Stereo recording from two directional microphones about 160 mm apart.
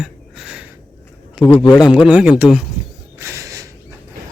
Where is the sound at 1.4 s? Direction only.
30° left (ahead or behind).